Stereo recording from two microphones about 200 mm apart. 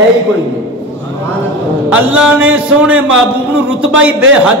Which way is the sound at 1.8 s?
5° right (ahead or behind).